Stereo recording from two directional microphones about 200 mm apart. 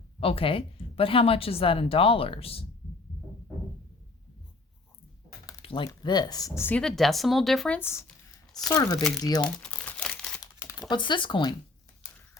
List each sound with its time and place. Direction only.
0.2 s a woman's voice: 25° left (ahead or behind)
5.5 s a woman's voice: 25° left (ahead or behind)
9.4 s crumpling: 5° left (ahead or behind)
10.4 s typing: 15° left (ahead or behind)